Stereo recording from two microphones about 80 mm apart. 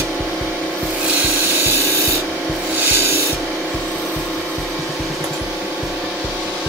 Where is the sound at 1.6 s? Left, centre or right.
Right.